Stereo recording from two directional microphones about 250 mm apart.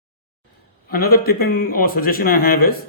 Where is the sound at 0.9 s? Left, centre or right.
Left.